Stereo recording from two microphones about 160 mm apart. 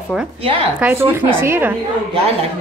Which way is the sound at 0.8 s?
15° right (ahead or behind).